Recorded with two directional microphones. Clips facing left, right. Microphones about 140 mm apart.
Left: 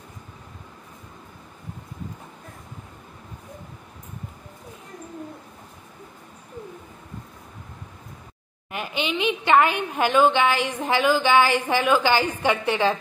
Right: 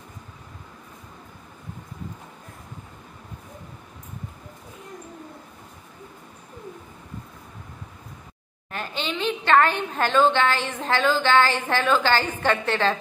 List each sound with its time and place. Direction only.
8.7 s a woman's voice: 15° left (ahead or behind)